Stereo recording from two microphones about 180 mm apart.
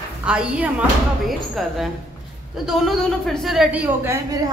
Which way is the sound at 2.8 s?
Centre (ahead or behind).